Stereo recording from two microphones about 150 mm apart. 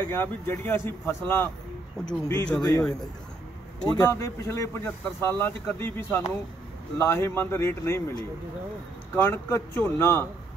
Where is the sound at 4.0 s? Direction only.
20° left (ahead or behind).